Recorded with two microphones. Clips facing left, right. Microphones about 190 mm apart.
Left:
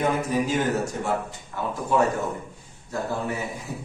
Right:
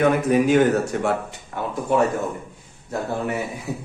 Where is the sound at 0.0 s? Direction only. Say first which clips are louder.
Right 6 dB; 65° right (ahead or behind).